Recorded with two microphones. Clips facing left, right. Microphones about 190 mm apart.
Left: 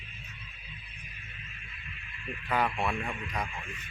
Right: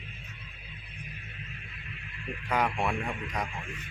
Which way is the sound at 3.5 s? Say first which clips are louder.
Right 2 dB; 70° right (ahead or behind).